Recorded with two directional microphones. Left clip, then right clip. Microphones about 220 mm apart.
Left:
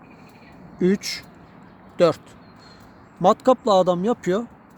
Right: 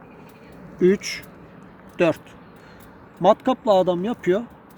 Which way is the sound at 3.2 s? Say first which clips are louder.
Left 1 dB; 25° left (ahead or behind).